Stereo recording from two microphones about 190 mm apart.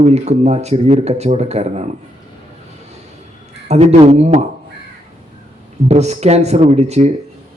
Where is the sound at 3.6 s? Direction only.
35° right (ahead or behind).